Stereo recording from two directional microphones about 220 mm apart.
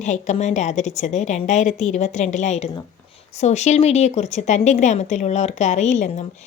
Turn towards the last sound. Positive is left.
turn(degrees=30)  # may be behind; listen again after turning